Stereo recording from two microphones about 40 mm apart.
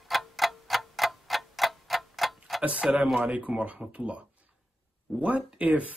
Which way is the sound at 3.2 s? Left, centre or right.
Right.